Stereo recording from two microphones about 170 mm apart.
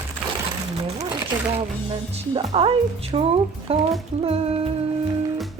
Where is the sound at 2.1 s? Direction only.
35° right (ahead or behind).